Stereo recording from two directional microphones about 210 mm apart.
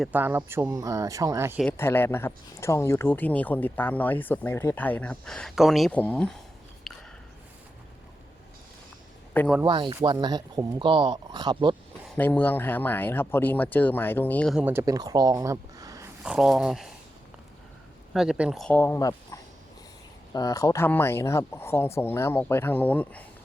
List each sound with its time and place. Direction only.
0.0 s speech: 10° right (ahead or behind)
1.6 s speech: 10° left (ahead or behind)
6.9 s a sound: centre (ahead or behind)
9.6 s speech: 20° right (ahead or behind)
12.1 s speech: 10° left (ahead or behind)
14.5 s speech: 10° right (ahead or behind)
16.2 s speech: 5° right (ahead or behind)
18.1 s speech: centre (ahead or behind)